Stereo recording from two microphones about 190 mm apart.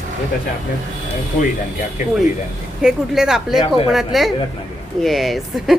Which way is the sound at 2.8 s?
5° right (ahead or behind).